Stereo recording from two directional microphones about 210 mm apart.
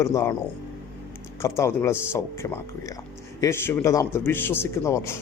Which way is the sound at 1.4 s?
15° left (ahead or behind).